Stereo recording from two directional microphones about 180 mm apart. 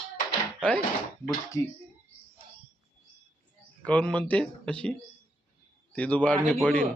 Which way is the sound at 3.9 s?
10° left (ahead or behind).